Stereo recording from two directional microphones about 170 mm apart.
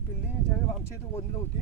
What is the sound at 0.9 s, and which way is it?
Speech, 15° left (ahead or behind).